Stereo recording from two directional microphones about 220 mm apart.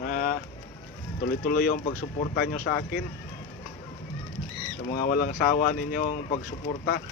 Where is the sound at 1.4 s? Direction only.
40° left (ahead or behind).